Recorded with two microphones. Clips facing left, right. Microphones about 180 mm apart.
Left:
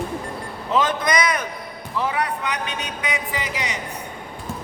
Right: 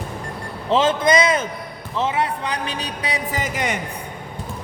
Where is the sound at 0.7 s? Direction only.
25° right (ahead or behind); by 3.8 s 50° right (ahead or behind).